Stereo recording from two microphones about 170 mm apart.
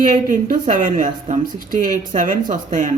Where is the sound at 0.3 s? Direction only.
50° right (ahead or behind).